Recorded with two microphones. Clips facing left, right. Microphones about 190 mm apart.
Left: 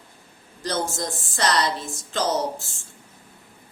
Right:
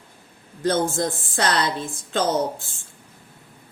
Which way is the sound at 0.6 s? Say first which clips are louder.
Right 6 dB; 55° right (ahead or behind).